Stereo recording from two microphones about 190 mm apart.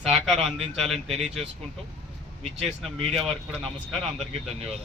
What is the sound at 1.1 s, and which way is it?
Speech, centre (ahead or behind).